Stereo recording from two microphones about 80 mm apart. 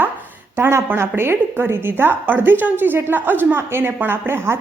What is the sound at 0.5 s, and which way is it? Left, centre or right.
A woman's voice, right.